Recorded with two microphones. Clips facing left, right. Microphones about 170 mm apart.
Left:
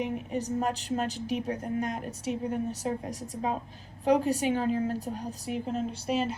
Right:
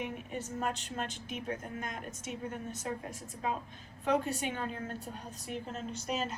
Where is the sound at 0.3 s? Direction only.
35° left (ahead or behind).